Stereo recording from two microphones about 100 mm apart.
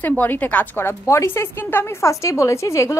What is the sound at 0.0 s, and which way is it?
A woman's voice, 20° left (ahead or behind).